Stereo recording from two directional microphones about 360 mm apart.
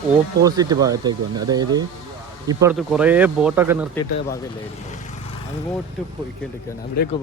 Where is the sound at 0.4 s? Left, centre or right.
Centre.